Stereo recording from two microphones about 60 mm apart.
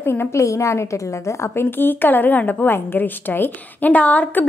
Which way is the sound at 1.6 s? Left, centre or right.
Left.